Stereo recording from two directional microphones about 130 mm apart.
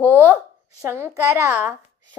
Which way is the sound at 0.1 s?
15° right (ahead or behind).